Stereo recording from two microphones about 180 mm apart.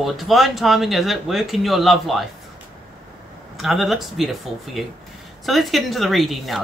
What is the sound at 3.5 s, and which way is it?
Speech, centre (ahead or behind).